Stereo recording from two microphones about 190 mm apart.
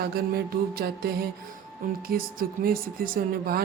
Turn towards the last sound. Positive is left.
turn(degrees=-50)  # may be behind; listen again after turning